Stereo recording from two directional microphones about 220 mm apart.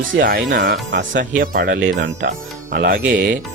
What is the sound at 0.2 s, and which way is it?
Speech, 45° right (ahead or behind).